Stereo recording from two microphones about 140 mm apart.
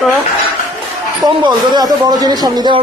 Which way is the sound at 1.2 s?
30° right (ahead or behind).